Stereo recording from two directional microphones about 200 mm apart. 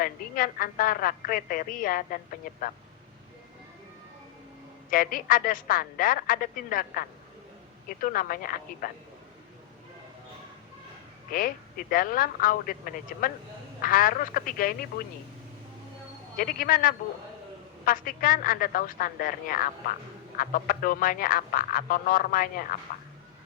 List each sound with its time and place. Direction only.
0.0 s speech: 45° left (ahead or behind)
4.9 s speech: 45° left (ahead or behind)
11.3 s speech: 45° left (ahead or behind)
16.4 s speech: 45° left (ahead or behind)